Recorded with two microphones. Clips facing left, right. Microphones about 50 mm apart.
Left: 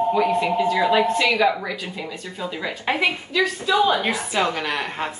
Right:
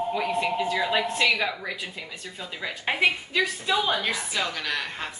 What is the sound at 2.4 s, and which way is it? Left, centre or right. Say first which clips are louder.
A woman's voice: left 5 dB; centre.